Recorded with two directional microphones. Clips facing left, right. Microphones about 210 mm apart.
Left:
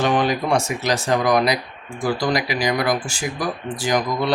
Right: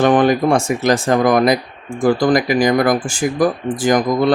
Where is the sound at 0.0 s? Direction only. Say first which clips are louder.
Right 7 dB; 50° right (ahead or behind).